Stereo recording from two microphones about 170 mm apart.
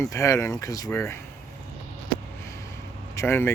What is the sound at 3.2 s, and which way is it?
Speech, 15° left (ahead or behind).